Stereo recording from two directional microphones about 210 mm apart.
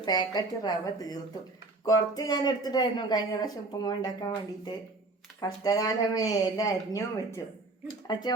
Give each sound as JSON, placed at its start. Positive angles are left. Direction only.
{"t": 0.0, "sound": "speech", "side_deg": 20}